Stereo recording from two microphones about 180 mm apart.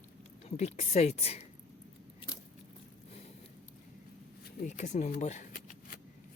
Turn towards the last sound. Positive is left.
turn(degrees=50)  # may be behind; listen again after turning